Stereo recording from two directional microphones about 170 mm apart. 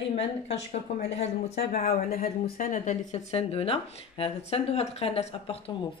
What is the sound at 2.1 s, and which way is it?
Speech, 55° left (ahead or behind).